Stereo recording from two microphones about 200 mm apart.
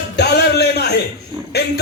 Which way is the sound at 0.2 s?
55° left (ahead or behind).